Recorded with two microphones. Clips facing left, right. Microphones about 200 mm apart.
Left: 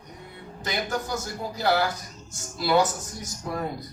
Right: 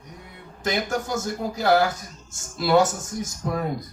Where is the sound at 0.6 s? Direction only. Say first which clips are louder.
Right 4 dB; 50° right (ahead or behind).